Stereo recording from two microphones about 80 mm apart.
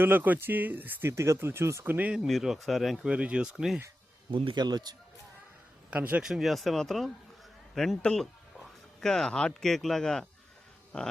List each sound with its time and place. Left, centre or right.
0.0 s speech: right
1.1 s speech: right
1.8 s speech: right
2.1 s speech: centre
3.1 s speech: centre
4.3 s a man's voice: right
5.9 s speech: centre
6.2 s a man's voice: centre